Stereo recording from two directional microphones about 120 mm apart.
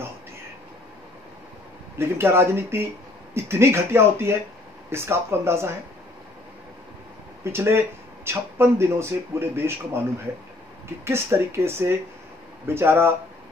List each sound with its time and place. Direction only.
2.0 s speech: 20° right (ahead or behind)
7.5 s speech: 20° right (ahead or behind)
11.1 s speech: 20° right (ahead or behind)